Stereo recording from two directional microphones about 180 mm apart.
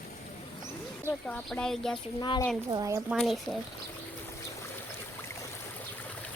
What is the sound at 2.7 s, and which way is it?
Speech, 20° right (ahead or behind).